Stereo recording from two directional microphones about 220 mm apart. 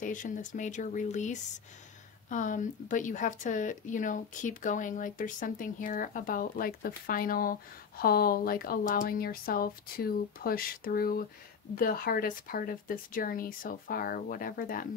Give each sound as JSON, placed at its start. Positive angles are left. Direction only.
{"t": 0.0, "sound": "a woman's voice", "side_deg": 35}